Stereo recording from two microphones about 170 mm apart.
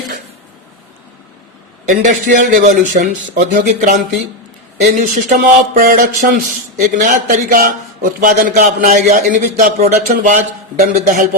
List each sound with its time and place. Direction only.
1.9 s speech: 45° right (ahead or behind)